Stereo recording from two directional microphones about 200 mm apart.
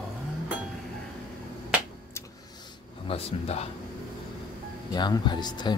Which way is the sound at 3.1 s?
30° left (ahead or behind).